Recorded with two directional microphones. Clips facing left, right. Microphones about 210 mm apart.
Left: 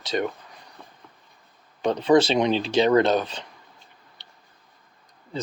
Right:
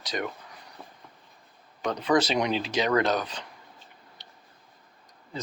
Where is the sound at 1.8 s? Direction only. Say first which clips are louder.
Left 6 dB; 25° left (ahead or behind).